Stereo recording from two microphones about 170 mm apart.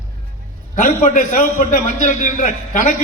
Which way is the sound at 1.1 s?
50° left (ahead or behind).